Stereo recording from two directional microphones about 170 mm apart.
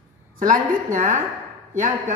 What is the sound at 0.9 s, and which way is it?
A woman's voice, 45° right (ahead or behind).